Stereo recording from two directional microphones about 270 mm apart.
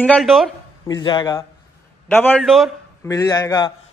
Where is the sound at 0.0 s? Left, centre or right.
Centre.